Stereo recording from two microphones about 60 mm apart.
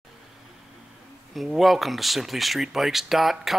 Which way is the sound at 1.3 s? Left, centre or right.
Centre.